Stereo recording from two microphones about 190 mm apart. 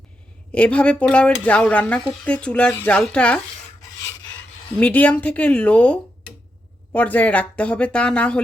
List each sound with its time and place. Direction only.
0.5 s speech: 5° left (ahead or behind)
4.8 s speech: 10° left (ahead or behind)